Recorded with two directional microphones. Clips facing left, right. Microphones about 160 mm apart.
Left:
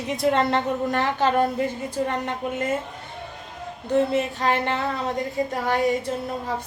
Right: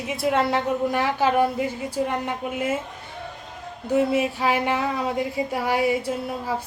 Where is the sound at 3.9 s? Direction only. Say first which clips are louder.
Right 1 dB; 10° right (ahead or behind).